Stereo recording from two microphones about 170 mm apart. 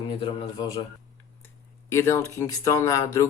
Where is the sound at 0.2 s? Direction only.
30° left (ahead or behind).